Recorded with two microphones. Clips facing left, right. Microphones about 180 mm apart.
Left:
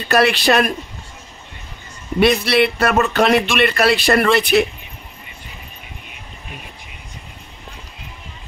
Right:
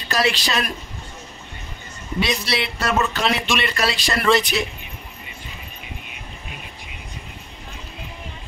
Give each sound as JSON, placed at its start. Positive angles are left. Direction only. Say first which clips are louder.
{"t": 0.1, "sound": "speech", "louder": "left 7 dB", "side_deg": 60}
{"t": 2.1, "sound": "speech", "louder": "left 9 dB", "side_deg": 55}